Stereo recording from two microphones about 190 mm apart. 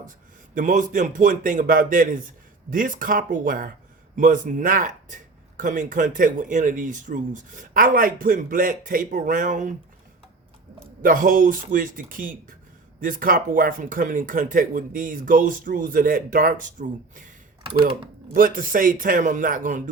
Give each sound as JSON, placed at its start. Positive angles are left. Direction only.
{"t": 0.5, "sound": "speech", "side_deg": -45}
{"t": 11.0, "sound": "speech", "side_deg": -45}
{"t": 17.7, "sound": "speech", "side_deg": -25}
{"t": 18.3, "sound": "speech", "side_deg": -45}